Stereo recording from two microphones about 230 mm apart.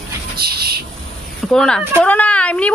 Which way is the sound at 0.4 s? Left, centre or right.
Right.